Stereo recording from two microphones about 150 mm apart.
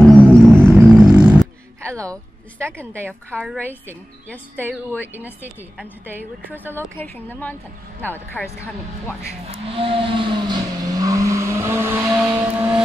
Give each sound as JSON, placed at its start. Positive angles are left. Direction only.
{"t": 0.0, "sound": "music", "side_deg": 5}
{"t": 0.9, "sound": "a sound", "side_deg": -5}
{"t": 1.8, "sound": "a sound", "side_deg": -20}
{"t": 2.6, "sound": "a woman's voice", "side_deg": -15}
{"t": 3.8, "sound": "a woman's voice", "side_deg": 10}
{"t": 5.1, "sound": "a woman's voice", "side_deg": -10}
{"t": 6.8, "sound": "a woman's voice", "side_deg": 15}
{"t": 9.5, "sound": "vehicle", "side_deg": -40}